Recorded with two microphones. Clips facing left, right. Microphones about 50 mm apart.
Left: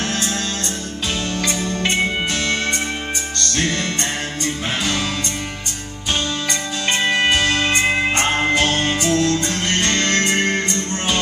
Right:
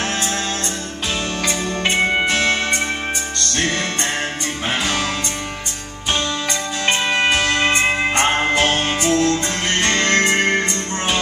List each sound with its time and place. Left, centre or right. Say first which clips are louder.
1.5 s music: right 2 dB; right
6.9 s music: even; centre
7.3 s music: right 1 dB; right
8.2 s music: right 1 dB; right
8.5 s music: even; right
9.1 s music: right 1 dB; centre